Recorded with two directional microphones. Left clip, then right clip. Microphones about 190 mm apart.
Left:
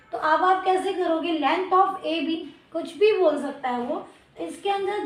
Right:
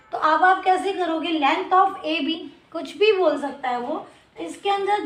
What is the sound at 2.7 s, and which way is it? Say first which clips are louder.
Speech: right 1 dB; 25° right (ahead or behind).